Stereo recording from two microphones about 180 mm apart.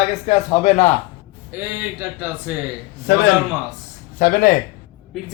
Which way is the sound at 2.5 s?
10° right (ahead or behind).